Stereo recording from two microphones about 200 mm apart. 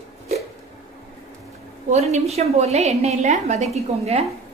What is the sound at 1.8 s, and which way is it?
A woman's voice, 35° right (ahead or behind).